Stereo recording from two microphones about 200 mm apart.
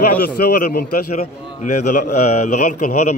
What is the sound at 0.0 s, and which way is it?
A man's voice, 50° left (ahead or behind).